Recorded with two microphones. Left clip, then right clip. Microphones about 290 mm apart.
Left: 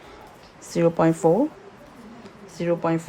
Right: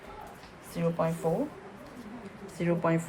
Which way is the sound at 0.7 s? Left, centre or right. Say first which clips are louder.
Left 10 dB; left.